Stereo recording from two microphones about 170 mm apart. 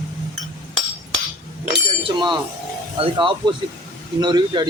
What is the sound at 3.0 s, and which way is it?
Speech, 30° right (ahead or behind).